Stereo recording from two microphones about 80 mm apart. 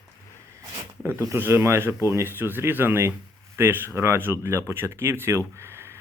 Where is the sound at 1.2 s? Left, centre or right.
Right.